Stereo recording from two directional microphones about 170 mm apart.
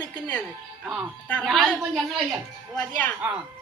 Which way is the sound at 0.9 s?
Centre (ahead or behind).